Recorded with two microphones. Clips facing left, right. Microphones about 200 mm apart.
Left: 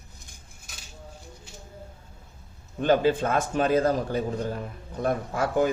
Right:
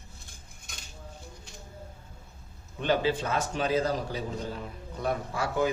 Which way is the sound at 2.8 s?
50° left (ahead or behind).